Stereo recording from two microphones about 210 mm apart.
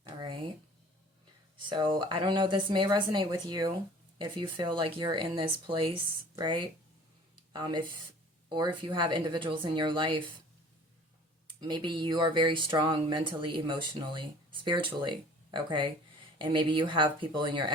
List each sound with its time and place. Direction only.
1.7 s speech: 25° right (ahead or behind)
11.7 s speech: 20° right (ahead or behind)